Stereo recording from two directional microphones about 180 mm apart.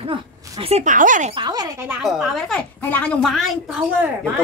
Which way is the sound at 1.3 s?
25° right (ahead or behind).